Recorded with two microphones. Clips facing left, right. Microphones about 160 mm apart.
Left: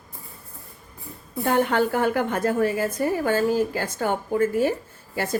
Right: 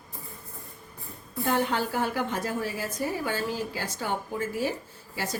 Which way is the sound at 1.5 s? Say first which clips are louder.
Left 6 dB; 55° left (ahead or behind).